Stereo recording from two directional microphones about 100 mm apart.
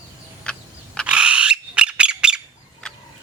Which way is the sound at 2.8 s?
5° left (ahead or behind).